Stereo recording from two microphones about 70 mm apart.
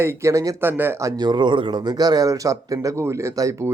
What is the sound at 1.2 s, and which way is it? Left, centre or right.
A man's voice, right.